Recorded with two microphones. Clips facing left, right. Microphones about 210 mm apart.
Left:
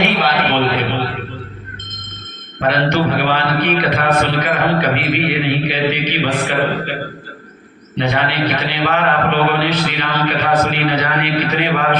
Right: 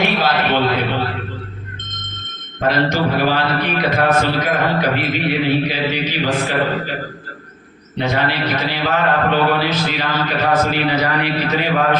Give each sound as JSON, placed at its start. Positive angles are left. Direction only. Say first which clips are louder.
{"t": 0.0, "sound": "a sound", "louder": "left 1 dB", "side_deg": 65}
{"t": 2.6, "sound": "a man's voice", "louder": "left 1 dB", "side_deg": 65}
{"t": 7.9, "sound": "a man's voice", "louder": "left 1 dB", "side_deg": 65}